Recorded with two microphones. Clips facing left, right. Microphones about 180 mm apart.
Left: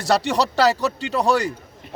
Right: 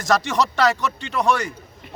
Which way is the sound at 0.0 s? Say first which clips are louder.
Left 1 dB; 35° left (ahead or behind).